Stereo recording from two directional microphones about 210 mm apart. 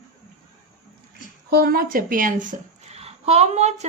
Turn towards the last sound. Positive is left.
turn(degrees=-30)  # may be behind; listen again after turning